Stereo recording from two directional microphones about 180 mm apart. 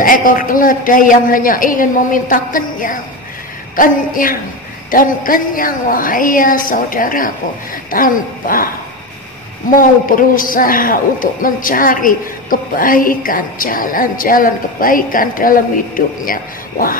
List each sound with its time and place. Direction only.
0.0 s a man's voice: 50° left (ahead or behind)
9.7 s a man's voice: 50° left (ahead or behind)